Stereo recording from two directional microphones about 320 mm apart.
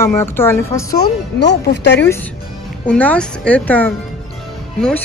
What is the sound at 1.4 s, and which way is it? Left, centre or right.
Speech, left.